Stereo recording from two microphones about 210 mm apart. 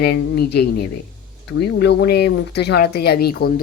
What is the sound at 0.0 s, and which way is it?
Speech, 50° left (ahead or behind).